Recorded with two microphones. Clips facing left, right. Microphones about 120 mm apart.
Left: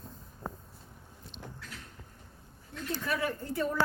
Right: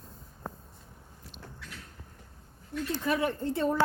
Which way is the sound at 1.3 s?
10° right (ahead or behind).